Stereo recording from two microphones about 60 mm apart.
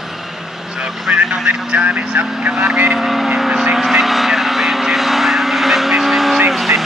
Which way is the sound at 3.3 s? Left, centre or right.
Centre.